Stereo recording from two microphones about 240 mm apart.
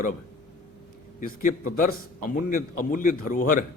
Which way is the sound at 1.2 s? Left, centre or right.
Left.